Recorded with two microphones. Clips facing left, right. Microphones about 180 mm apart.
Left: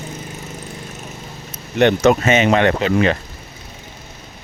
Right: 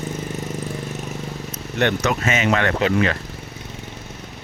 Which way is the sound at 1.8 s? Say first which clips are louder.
Left 7 dB; 30° left (ahead or behind).